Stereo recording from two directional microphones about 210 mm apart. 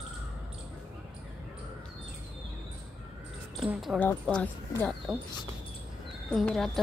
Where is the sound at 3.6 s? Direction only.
Centre (ahead or behind).